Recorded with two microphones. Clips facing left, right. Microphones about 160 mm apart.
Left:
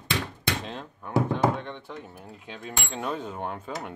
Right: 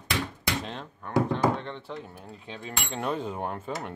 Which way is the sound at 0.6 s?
Centre (ahead or behind).